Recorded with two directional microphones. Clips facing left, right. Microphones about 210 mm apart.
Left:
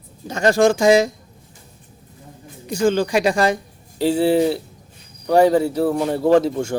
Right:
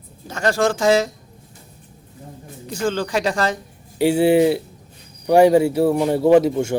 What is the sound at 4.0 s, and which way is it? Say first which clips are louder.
Speech: right 2 dB; 10° right (ahead or behind).